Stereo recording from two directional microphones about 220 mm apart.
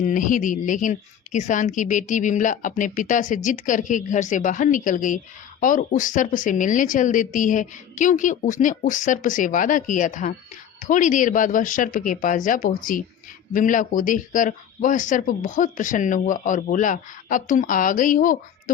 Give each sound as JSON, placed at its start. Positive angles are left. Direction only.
{"t": 0.0, "sound": "a woman's voice", "side_deg": 35}